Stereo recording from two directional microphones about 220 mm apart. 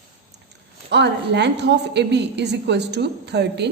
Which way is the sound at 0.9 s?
50° right (ahead or behind).